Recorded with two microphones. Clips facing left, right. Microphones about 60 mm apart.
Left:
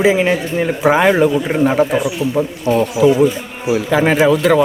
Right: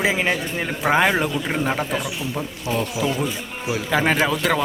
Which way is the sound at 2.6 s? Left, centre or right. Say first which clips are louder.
Left 11 dB; centre.